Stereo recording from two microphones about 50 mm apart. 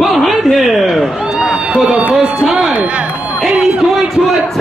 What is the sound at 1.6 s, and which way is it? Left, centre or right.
Run, centre.